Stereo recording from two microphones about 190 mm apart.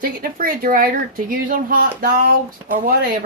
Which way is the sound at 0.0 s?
50° right (ahead or behind).